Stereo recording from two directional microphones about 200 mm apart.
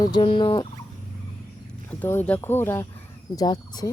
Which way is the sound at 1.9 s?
10° left (ahead or behind).